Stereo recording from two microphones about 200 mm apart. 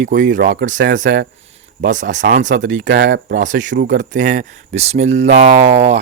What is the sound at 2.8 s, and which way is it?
Speech, 60° right (ahead or behind).